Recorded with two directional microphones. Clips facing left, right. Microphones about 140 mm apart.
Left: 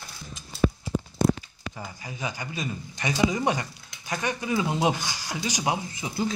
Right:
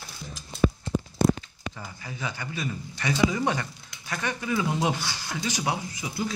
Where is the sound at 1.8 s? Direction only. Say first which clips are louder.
Left 3 dB; 15° left (ahead or behind).